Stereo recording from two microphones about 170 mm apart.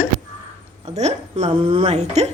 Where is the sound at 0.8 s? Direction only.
40° right (ahead or behind).